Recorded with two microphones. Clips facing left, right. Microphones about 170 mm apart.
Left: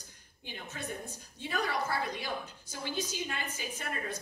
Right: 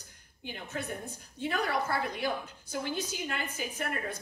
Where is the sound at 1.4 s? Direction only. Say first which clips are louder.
Right 3 dB; 60° right (ahead or behind).